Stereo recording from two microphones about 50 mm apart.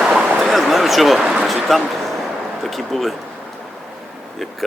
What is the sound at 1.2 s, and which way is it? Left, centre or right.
Speech, centre.